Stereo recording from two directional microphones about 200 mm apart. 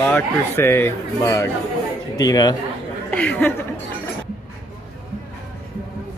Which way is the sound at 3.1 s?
5° left (ahead or behind).